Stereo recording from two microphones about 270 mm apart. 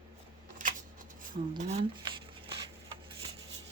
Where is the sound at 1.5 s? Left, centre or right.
Right.